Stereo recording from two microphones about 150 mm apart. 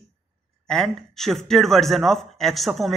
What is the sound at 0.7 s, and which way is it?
A man's voice, 5° left (ahead or behind).